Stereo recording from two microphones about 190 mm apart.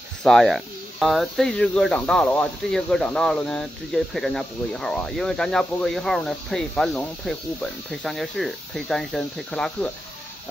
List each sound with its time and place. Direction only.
0.2 s speech: centre (ahead or behind)